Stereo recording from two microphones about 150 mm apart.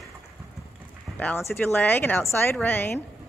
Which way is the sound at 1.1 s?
15° left (ahead or behind).